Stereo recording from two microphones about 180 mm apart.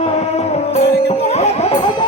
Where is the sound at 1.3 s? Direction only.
35° left (ahead or behind).